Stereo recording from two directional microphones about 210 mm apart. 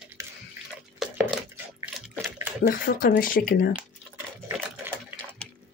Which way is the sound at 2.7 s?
40° left (ahead or behind).